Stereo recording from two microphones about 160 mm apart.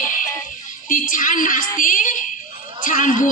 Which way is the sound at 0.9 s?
55° left (ahead or behind).